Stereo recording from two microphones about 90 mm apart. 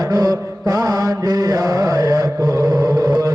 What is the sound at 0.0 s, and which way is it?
Mantra, 45° right (ahead or behind).